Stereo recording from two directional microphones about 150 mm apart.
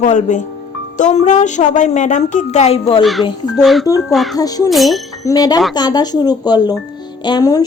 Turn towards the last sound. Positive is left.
turn(degrees=25)  # may be behind; listen again after turning